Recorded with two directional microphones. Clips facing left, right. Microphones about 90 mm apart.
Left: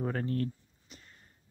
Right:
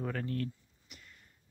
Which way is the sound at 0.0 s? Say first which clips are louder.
Left 3 dB; 35° left (ahead or behind).